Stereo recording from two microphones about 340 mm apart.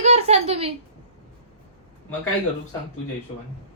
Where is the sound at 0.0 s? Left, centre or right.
Centre.